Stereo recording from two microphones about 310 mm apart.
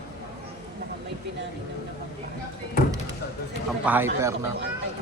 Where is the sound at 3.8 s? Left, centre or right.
Centre.